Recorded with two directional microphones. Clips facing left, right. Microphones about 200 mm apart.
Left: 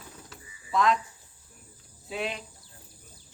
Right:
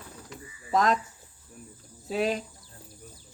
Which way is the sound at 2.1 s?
40° right (ahead or behind).